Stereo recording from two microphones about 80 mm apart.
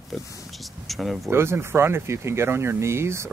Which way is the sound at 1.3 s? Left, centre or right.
Right.